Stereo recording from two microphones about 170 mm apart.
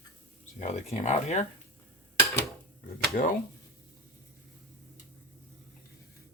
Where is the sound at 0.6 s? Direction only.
40° left (ahead or behind).